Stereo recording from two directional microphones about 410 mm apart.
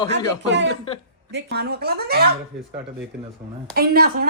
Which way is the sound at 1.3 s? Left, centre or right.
Right.